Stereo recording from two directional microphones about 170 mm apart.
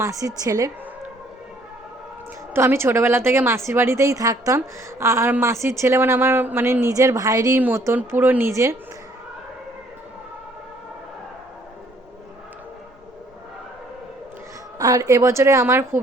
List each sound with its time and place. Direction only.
0.0 s a woman's voice: 20° right (ahead or behind)
2.5 s a woman's voice: 15° right (ahead or behind)
14.8 s a woman's voice: 20° right (ahead or behind)